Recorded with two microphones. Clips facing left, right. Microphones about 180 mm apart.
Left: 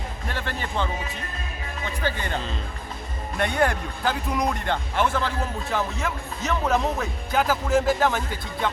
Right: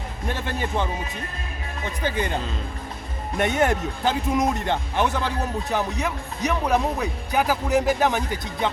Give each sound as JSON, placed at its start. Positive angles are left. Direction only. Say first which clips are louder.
{"t": 0.3, "sound": "speech", "louder": "right 4 dB", "side_deg": -15}
{"t": 2.0, "sound": "speech", "louder": "right 3 dB", "side_deg": -15}